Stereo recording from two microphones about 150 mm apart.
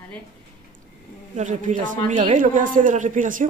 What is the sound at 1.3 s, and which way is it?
A woman's voice, 55° right (ahead or behind).